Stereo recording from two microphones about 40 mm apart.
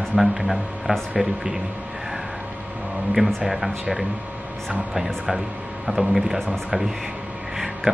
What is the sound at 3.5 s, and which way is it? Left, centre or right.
Speech, centre.